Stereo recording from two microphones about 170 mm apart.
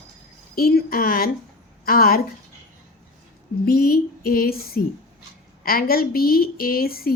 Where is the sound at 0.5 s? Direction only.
60° left (ahead or behind).